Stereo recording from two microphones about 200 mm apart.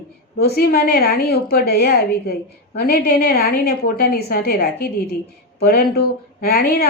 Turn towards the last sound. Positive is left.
turn(degrees=50)  # may be behind; listen again after turning